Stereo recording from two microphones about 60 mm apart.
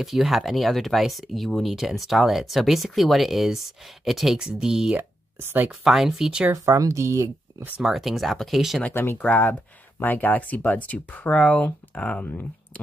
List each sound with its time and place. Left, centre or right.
0.0 s speech: centre
4.9 s a sound: right
5.7 s speech: centre
6.5 s speech: right
7.8 s speech: centre
8.9 s speech: left